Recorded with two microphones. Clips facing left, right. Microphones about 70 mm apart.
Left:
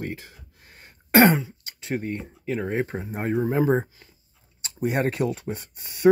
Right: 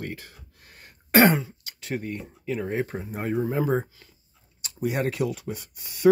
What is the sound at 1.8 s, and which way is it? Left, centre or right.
Speech, left.